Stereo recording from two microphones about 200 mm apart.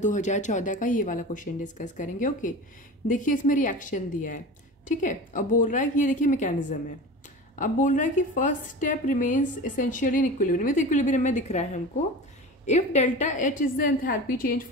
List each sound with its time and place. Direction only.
0.0 s a woman's voice: 35° left (ahead or behind)